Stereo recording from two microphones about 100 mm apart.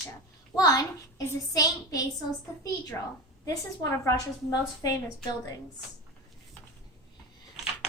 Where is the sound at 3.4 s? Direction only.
35° left (ahead or behind).